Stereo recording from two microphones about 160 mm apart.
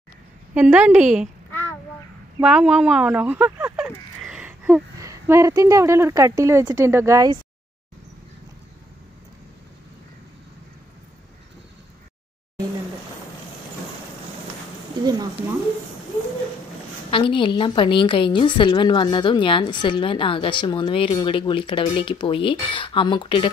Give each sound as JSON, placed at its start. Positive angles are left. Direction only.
{"t": 0.6, "sound": "a woman's voice", "side_deg": -10}
{"t": 1.5, "sound": "child singing", "side_deg": 15}
{"t": 2.4, "sound": "speech", "side_deg": -5}
{"t": 4.2, "sound": "a sound", "side_deg": -5}
{"t": 4.9, "sound": "a woman's voice", "side_deg": -20}
{"t": 15.0, "sound": "a sound", "side_deg": -25}
{"t": 17.1, "sound": "a woman's voice", "side_deg": 30}